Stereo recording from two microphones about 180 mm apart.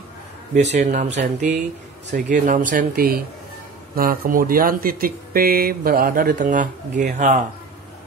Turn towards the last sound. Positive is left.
turn(degrees=-45)  # may be behind; listen again after turning